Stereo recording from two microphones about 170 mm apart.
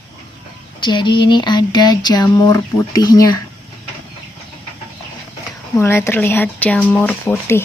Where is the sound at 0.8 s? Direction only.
25° left (ahead or behind).